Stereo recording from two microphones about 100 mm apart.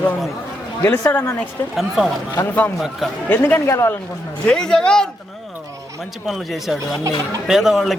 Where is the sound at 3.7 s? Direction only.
30° left (ahead or behind).